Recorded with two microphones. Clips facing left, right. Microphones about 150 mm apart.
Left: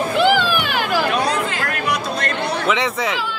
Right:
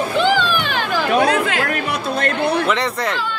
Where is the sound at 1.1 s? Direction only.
60° right (ahead or behind).